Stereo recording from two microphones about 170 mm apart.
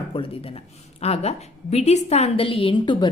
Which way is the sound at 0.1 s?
30° left (ahead or behind).